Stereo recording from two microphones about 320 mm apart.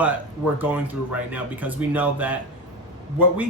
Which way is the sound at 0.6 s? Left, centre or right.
Centre.